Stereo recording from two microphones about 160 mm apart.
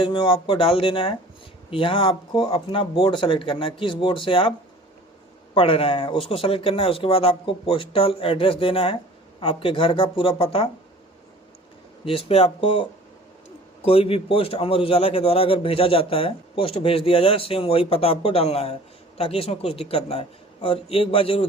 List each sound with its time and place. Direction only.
0.0 s a man's voice: 30° left (ahead or behind)
5.5 s a man's voice: 35° left (ahead or behind)
12.0 s a man's voice: 35° left (ahead or behind)